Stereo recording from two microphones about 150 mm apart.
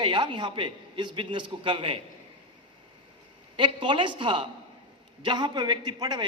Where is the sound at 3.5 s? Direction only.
30° right (ahead or behind).